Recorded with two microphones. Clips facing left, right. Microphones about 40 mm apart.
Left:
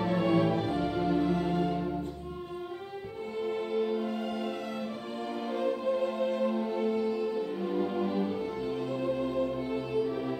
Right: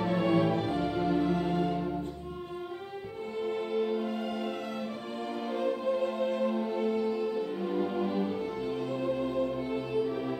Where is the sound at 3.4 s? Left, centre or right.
Centre.